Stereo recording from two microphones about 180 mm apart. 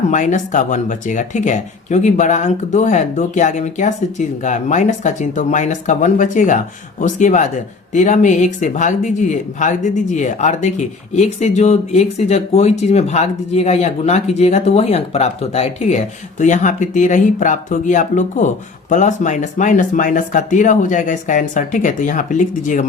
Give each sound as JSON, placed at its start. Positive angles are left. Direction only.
{"t": 0.1, "sound": "speech", "side_deg": 45}